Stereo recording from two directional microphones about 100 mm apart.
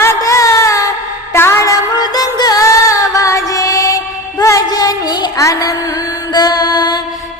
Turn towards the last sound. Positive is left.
turn(degrees=45)  # may be behind; listen again after turning